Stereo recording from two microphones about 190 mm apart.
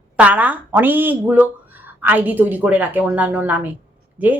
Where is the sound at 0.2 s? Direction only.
5° right (ahead or behind).